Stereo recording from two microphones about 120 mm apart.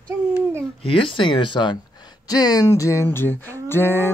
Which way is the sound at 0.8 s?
50° left (ahead or behind).